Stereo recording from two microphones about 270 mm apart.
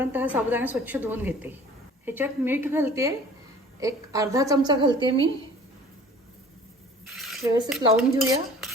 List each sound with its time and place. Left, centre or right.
0.0 s a woman's voice: centre
7.1 s a sound: centre
7.7 s dishes: centre